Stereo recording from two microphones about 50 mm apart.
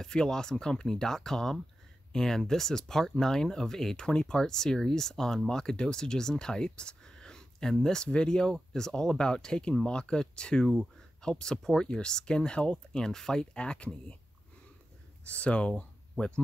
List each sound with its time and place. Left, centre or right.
0.0 s speech: centre
15.2 s speech: left